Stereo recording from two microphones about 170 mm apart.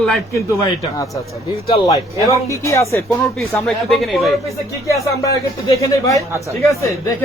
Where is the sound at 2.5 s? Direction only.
15° left (ahead or behind).